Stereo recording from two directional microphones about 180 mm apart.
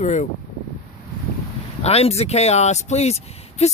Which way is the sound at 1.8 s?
35° left (ahead or behind).